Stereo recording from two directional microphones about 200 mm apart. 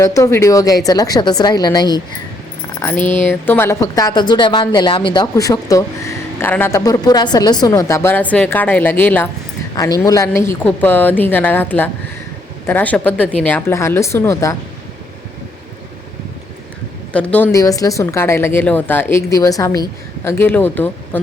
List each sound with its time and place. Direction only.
0.0 s a woman's voice: 15° left (ahead or behind)
2.8 s a woman's voice: 10° left (ahead or behind)
17.1 s a woman's voice: 5° left (ahead or behind)